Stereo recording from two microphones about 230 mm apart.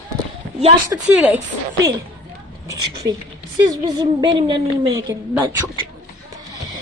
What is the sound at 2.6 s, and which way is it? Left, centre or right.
A woman's voice, centre.